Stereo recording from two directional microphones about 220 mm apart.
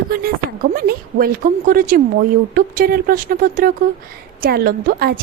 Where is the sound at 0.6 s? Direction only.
40° right (ahead or behind).